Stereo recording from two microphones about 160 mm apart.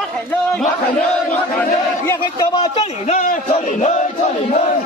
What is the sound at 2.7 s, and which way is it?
A man's voice, 45° left (ahead or behind).